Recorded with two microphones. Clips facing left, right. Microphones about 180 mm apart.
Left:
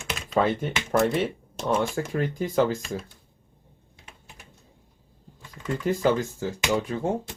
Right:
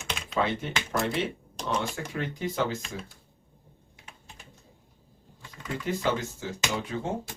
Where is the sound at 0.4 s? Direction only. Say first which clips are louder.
Left 5 dB; 45° left (ahead or behind).